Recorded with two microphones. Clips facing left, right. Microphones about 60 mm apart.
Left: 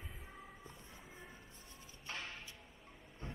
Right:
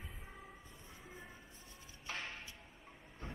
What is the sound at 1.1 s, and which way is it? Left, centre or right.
Train, centre.